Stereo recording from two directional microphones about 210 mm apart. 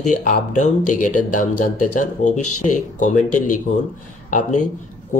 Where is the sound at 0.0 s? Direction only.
35° left (ahead or behind).